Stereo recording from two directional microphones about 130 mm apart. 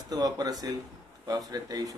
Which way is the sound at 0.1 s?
30° right (ahead or behind).